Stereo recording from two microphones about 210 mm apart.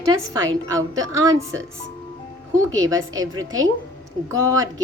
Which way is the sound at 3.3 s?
75° right (ahead or behind).